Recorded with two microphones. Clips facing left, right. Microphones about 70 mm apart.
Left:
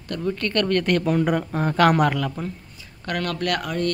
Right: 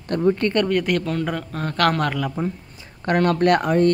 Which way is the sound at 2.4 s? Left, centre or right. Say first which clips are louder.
Right 5 dB; right.